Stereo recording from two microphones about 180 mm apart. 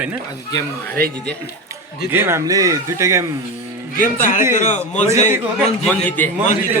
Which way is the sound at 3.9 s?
50° left (ahead or behind).